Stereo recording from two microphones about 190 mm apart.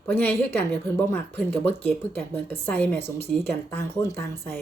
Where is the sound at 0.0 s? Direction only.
10° left (ahead or behind).